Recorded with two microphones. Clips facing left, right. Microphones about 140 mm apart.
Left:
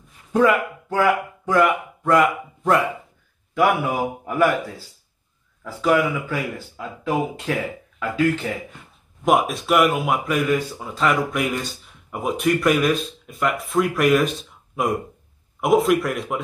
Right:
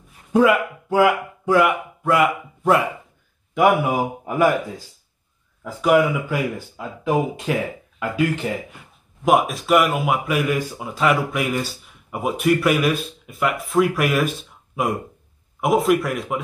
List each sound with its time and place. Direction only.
0.3 s speech: 10° right (ahead or behind)
9.2 s speech: centre (ahead or behind)
15.6 s speech: centre (ahead or behind)